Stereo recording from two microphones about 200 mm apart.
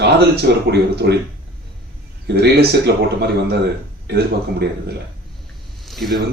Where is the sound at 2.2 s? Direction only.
55° right (ahead or behind).